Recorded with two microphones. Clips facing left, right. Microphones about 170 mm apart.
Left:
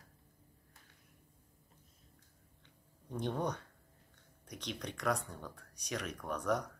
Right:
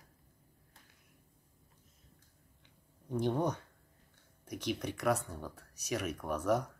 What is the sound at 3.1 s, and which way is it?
Speech, 10° right (ahead or behind).